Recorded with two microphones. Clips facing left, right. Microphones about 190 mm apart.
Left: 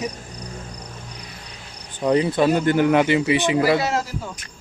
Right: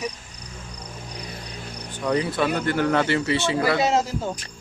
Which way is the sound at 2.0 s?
25° left (ahead or behind).